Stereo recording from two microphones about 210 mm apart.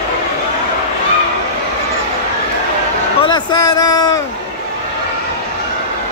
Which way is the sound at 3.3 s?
20° left (ahead or behind).